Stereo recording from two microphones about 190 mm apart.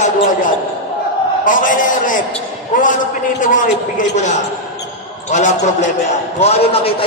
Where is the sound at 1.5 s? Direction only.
45° left (ahead or behind).